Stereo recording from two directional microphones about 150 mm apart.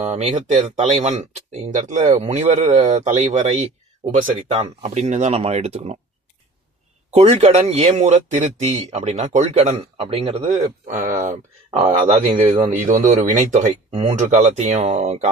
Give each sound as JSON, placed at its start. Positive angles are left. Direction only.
{"t": 0.0, "sound": "speech", "side_deg": -50}
{"t": 7.1, "sound": "speech", "side_deg": -45}
{"t": 10.9, "sound": "speech", "side_deg": -60}
{"t": 12.0, "sound": "speech", "side_deg": -40}
{"t": 12.7, "sound": "speech", "side_deg": -60}
{"t": 14.2, "sound": "speech", "side_deg": -50}